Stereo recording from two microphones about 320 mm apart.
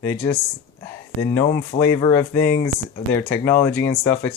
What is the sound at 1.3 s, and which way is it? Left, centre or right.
Speech, centre.